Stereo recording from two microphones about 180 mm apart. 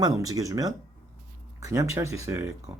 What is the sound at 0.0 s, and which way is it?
Speech, 20° right (ahead or behind).